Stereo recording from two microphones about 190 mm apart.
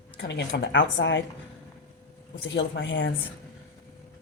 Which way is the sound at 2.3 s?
75° left (ahead or behind).